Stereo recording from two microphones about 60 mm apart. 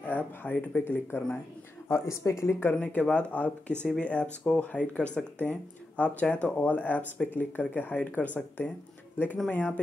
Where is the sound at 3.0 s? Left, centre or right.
Centre.